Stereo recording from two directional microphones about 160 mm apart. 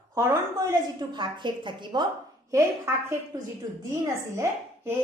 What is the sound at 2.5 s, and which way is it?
A woman's voice, 15° right (ahead or behind).